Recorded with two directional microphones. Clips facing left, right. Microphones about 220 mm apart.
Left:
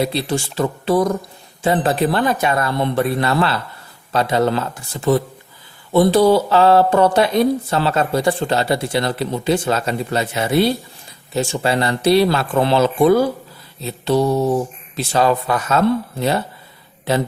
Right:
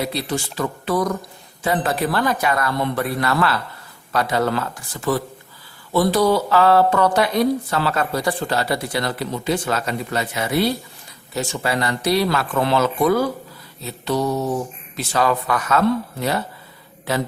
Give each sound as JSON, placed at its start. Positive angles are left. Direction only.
{"t": 0.0, "sound": "speech", "side_deg": 30}